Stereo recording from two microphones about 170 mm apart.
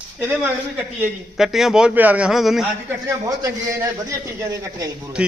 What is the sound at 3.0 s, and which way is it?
A man's voice, 20° right (ahead or behind).